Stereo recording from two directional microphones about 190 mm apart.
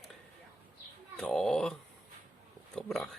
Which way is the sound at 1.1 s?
5° left (ahead or behind).